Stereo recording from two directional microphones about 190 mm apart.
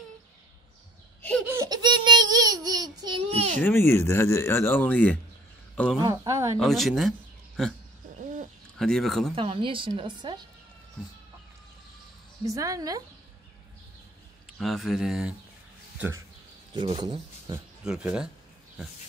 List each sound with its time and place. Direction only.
1.4 s a sound: 15° right (ahead or behind)
3.5 s speech: 10° left (ahead or behind)
5.9 s speech: 15° right (ahead or behind)
6.6 s speech: centre (ahead or behind)
8.7 s speech: centre (ahead or behind)
9.3 s speech: 30° right (ahead or behind)
12.4 s speech: 15° right (ahead or behind)
14.4 s speech: centre (ahead or behind)
16.7 s speech: 25° right (ahead or behind)
17.8 s speech: 5° right (ahead or behind)